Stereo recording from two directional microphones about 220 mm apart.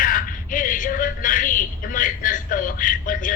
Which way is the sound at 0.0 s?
40° left (ahead or behind).